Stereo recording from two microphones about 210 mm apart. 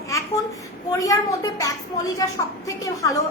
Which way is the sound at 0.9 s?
15° left (ahead or behind).